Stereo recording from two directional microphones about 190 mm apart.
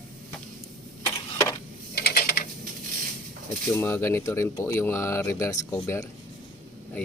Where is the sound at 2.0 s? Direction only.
50° left (ahead or behind).